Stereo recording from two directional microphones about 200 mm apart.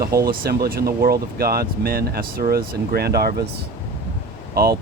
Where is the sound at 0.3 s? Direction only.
50° right (ahead or behind).